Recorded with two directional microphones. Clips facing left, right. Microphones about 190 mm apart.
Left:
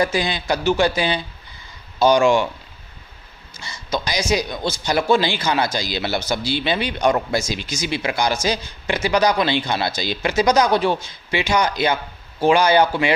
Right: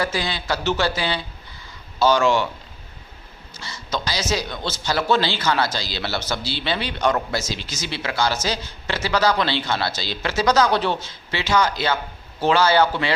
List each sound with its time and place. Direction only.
0.0 s a man's voice: 15° left (ahead or behind)
3.6 s a man's voice: 15° left (ahead or behind)